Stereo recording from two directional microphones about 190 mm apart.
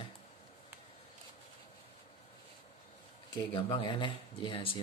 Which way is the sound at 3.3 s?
25° left (ahead or behind).